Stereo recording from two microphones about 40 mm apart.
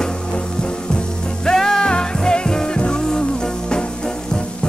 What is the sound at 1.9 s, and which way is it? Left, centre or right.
Music, left.